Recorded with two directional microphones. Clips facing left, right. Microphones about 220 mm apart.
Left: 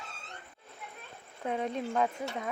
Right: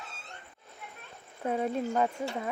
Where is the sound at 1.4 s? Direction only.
5° right (ahead or behind).